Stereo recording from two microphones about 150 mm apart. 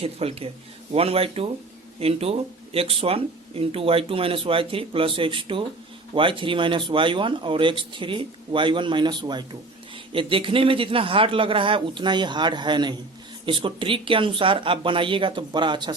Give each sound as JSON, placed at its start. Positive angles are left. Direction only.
{"t": 0.0, "sound": "speech", "side_deg": -40}